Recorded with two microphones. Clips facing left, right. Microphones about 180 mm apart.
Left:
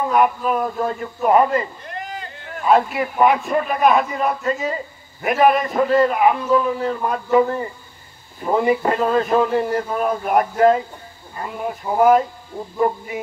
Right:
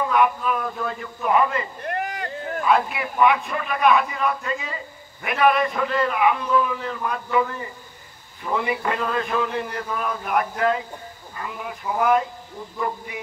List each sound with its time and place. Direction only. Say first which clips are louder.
0.1 s a man's voice: left 5 dB; 45° left (ahead or behind)
1.8 s a sound: right 4 dB; 60° right (ahead or behind)
2.6 s a man's voice: left 5 dB; 40° left (ahead or behind)
12.6 s speech: left 7 dB; 25° left (ahead or behind)